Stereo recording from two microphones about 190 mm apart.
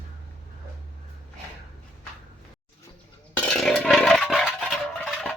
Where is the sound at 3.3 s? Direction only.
5° left (ahead or behind).